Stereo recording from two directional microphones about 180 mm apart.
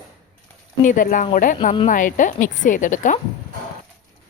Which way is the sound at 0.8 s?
45° left (ahead or behind).